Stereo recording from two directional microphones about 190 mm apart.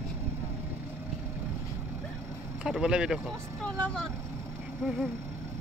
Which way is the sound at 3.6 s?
5° left (ahead or behind).